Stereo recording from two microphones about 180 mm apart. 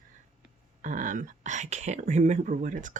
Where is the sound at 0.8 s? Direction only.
45° right (ahead or behind).